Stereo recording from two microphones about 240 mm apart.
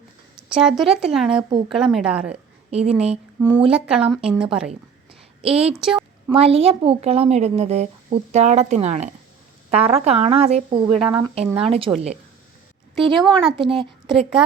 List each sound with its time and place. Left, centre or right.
0.3 s speech: centre
2.6 s a woman's voice: right
3.7 s speech: centre
5.4 s a woman's voice: right
5.8 s a sound: centre
6.3 s a woman's voice: right
13.1 s a woman's voice: centre